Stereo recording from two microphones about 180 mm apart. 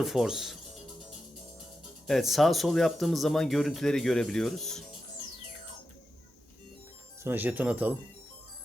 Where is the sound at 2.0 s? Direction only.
Centre (ahead or behind).